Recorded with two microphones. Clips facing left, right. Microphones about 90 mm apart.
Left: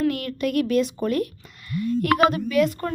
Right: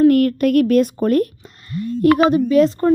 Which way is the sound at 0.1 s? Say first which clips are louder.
Right 11 dB; 50° right (ahead or behind).